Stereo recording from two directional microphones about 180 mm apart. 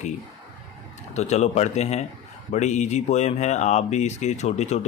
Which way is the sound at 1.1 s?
40° left (ahead or behind).